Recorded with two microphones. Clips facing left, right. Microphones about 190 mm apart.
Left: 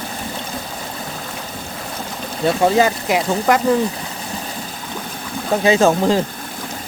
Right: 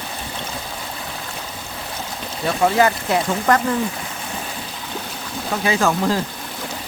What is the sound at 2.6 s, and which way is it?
Speech, 20° left (ahead or behind).